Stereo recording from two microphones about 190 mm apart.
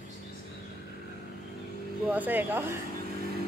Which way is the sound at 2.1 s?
10° right (ahead or behind).